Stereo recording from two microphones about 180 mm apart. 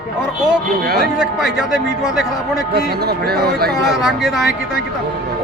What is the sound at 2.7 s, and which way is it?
Speech, 60° right (ahead or behind).